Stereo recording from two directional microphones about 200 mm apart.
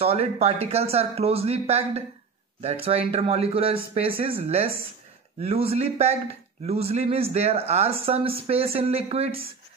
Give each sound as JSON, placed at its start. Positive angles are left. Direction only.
{"t": 0.0, "sound": "speech", "side_deg": -30}